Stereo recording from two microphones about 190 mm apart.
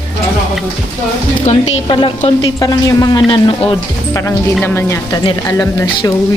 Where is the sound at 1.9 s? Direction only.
25° left (ahead or behind).